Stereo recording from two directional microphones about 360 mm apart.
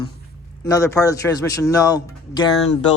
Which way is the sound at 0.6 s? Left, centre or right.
Centre.